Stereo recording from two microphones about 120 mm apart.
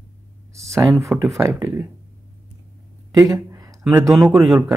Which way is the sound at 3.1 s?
30° right (ahead or behind).